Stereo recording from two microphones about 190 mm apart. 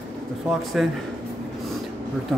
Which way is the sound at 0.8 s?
Centre (ahead or behind).